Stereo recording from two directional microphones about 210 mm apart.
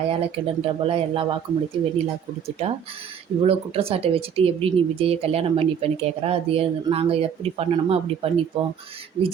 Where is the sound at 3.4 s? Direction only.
25° right (ahead or behind).